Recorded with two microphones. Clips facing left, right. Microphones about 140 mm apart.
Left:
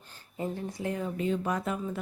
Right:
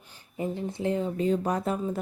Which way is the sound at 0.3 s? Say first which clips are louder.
Right 3 dB; 20° right (ahead or behind).